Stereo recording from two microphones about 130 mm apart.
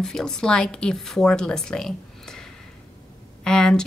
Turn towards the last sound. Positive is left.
turn(degrees=5)  # may be behind; listen again after turning